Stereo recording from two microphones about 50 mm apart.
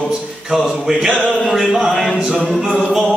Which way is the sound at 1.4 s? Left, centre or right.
Centre.